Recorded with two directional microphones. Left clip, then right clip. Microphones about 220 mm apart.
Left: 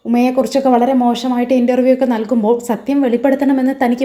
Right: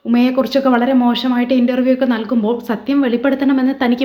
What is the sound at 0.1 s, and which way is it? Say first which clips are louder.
A woman's voice: left 1 dB; 15° left (ahead or behind).